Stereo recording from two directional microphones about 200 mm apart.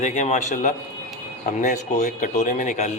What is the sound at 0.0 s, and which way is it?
Speech, 35° left (ahead or behind).